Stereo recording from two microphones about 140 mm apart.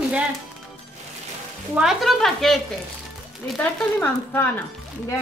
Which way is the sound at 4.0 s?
15° left (ahead or behind).